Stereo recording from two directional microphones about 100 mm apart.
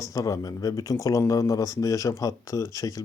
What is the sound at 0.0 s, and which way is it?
Speech, 35° left (ahead or behind).